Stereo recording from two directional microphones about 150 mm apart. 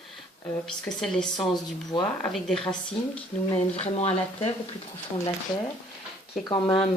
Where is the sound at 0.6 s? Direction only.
5° left (ahead or behind).